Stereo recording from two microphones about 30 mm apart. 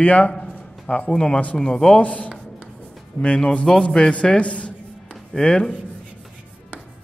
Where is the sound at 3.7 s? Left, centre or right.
Centre.